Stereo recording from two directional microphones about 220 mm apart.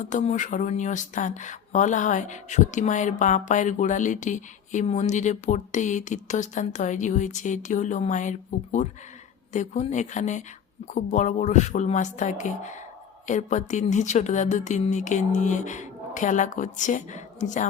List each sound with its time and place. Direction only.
0.0 s speech: 35° left (ahead or behind)